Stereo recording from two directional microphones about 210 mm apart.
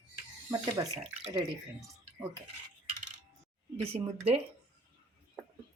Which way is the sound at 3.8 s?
25° right (ahead or behind).